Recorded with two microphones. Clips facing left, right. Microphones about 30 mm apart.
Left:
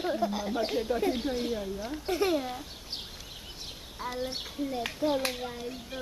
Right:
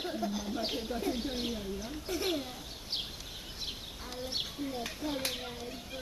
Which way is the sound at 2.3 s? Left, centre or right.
Centre.